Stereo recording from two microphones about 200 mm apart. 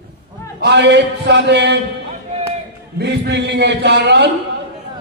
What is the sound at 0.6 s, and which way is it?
A man's voice, 60° right (ahead or behind).